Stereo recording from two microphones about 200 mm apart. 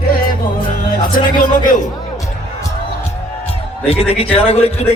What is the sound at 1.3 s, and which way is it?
Speech, 40° left (ahead or behind).